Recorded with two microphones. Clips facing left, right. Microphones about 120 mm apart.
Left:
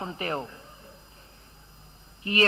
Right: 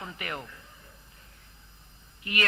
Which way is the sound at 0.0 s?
30° left (ahead or behind).